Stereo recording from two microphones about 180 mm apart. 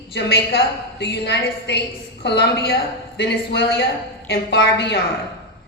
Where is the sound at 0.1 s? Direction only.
70° left (ahead or behind).